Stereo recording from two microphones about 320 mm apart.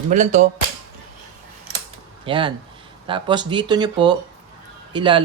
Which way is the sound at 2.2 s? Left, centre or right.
Centre.